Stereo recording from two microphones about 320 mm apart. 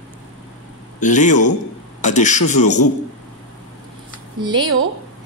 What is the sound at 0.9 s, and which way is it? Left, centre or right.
Speech, left.